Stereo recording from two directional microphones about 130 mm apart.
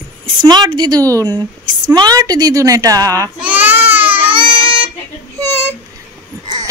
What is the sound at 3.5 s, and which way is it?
Baby cry, 15° right (ahead or behind).